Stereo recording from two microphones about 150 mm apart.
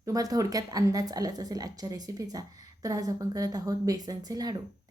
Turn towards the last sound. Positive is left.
turn(degrees=-25)  # may be behind; listen again after turning